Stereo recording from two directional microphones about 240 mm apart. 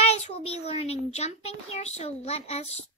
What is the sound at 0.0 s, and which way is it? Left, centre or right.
A child's voice, left.